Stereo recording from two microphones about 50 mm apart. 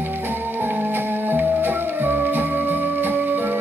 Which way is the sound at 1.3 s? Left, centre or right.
Right.